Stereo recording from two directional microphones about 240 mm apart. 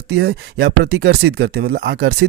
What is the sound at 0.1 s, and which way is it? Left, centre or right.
Speech, right.